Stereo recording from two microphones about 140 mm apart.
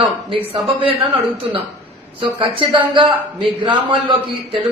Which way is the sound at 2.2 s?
35° right (ahead or behind).